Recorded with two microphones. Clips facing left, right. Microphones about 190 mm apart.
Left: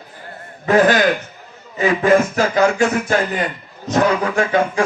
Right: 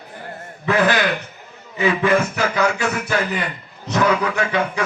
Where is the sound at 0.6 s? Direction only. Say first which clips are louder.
Left 5 dB; 45° left (ahead or behind).